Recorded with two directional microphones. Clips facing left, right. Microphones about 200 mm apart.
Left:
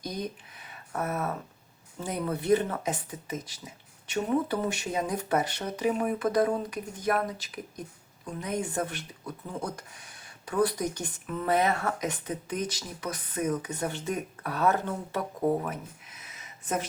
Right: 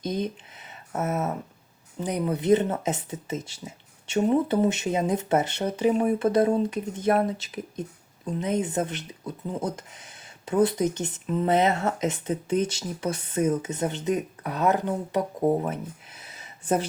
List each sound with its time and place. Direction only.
0.0 s speech: 25° right (ahead or behind)